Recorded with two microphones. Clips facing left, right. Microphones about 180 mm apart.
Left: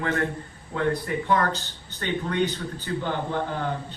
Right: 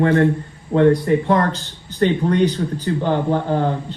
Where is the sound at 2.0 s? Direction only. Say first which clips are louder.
Right 9 dB; 40° right (ahead or behind).